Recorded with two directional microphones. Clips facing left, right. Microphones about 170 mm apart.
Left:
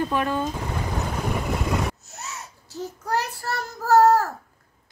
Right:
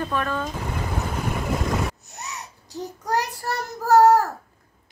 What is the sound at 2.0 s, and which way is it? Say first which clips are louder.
Child singing: right 1 dB; 15° right (ahead or behind).